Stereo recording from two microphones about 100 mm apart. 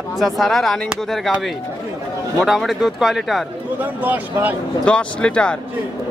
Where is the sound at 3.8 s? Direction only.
15° right (ahead or behind).